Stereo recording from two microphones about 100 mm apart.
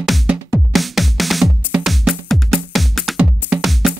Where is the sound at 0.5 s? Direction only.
Centre (ahead or behind).